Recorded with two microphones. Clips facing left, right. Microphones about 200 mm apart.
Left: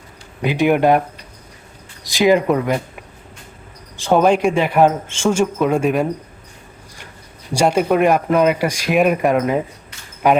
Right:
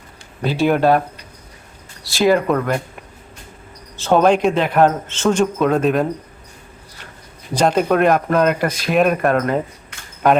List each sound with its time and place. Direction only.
0.4 s speech: 15° left (ahead or behind)
2.0 s speech: 15° left (ahead or behind)
4.1 s speech: 5° left (ahead or behind)
7.5 s speech: 10° left (ahead or behind)